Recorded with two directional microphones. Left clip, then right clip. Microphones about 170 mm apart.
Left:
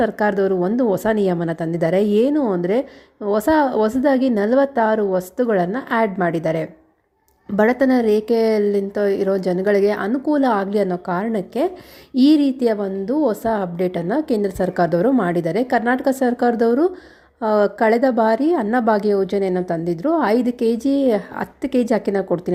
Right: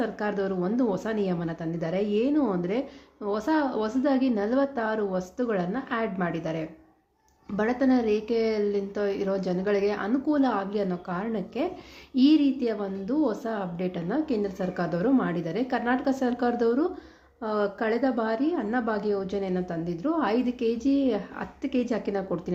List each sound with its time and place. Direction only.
0.0 s a woman's voice: 45° left (ahead or behind)